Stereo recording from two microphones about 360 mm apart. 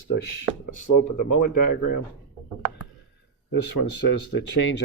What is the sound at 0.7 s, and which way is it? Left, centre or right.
Speech, left.